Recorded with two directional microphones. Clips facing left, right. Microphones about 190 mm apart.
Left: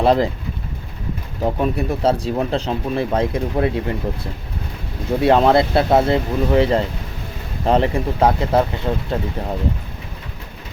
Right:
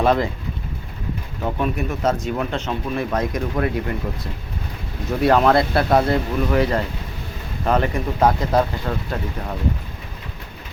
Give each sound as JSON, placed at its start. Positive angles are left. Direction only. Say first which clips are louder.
{"t": 0.0, "sound": "speech", "louder": "left 3 dB", "side_deg": 30}
{"t": 1.4, "sound": "speech", "louder": "left 4 dB", "side_deg": 35}
{"t": 5.2, "sound": "speech", "louder": "left 2 dB", "side_deg": 25}